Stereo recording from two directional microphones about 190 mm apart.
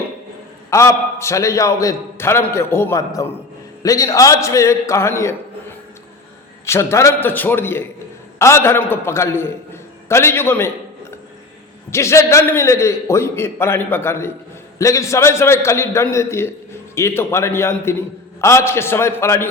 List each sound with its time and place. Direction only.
0.7 s a man's voice: 15° left (ahead or behind)
6.7 s a man's voice: 15° left (ahead or behind)
11.9 s a man's voice: 15° left (ahead or behind)